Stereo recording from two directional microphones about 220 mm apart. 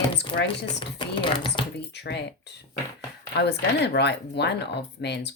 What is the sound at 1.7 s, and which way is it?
Speech, 50° left (ahead or behind).